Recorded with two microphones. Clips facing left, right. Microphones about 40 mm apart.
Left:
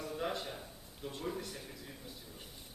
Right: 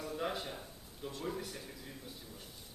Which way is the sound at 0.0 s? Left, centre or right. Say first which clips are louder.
Even; centre.